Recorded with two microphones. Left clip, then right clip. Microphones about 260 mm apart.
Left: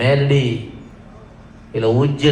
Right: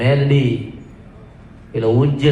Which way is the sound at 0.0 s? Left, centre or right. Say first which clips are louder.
Left 1 dB; left.